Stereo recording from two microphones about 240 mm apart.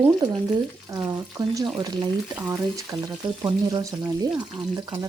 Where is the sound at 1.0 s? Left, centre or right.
Centre.